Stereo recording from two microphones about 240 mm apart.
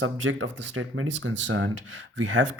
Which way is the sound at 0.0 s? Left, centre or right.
Right.